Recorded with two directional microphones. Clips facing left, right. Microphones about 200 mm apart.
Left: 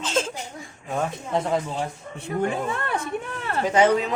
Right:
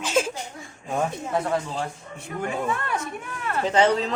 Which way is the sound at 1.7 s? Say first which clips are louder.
Left 1 dB; centre (ahead or behind).